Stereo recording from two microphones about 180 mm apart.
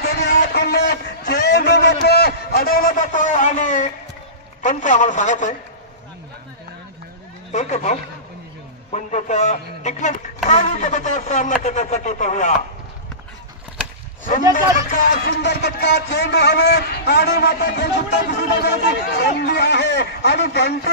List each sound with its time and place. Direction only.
0.0 s a sound: 65° left (ahead or behind)
0.3 s a man's voice: 60° left (ahead or behind); by 5.6 s 40° left (ahead or behind)
7.5 s speech: 40° left (ahead or behind)
14.9 s music: 55° left (ahead or behind)